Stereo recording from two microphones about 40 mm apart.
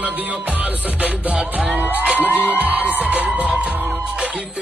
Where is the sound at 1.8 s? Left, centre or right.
Right.